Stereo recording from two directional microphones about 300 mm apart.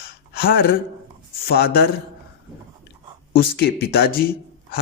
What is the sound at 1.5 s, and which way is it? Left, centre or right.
Speech, left.